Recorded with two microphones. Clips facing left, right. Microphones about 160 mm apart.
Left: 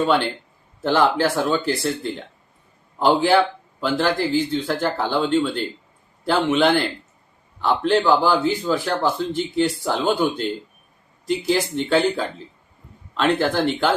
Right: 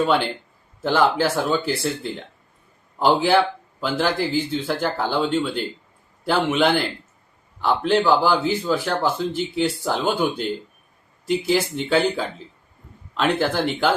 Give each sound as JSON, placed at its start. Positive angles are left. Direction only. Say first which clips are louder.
{"t": 0.8, "sound": "a man's voice", "louder": "left 1 dB", "side_deg": -5}